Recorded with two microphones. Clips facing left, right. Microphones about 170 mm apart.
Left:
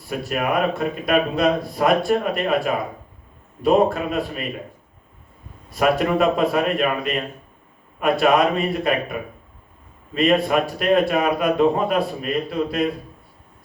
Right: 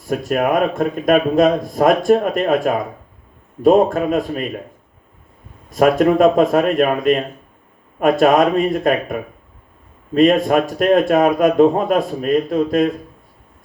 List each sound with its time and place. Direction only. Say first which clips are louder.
0.1 s speech: right 6 dB; 45° right (ahead or behind)
3.6 s speech: right 5 dB; 45° right (ahead or behind)
5.7 s speech: right 6 dB; 45° right (ahead or behind)
10.2 s speech: right 5 dB; 45° right (ahead or behind)